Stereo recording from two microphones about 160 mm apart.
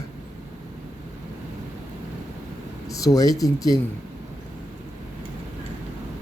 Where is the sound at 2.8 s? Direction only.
20° left (ahead or behind).